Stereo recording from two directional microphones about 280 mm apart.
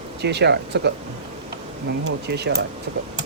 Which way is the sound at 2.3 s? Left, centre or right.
Right.